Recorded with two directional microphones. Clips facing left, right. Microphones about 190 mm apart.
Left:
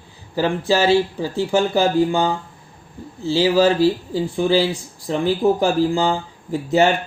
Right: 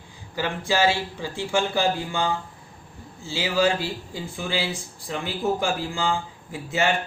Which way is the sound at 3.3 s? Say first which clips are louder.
Left 7 dB; 40° left (ahead or behind).